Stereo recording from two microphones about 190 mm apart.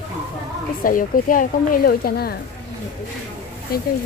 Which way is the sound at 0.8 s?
45° left (ahead or behind).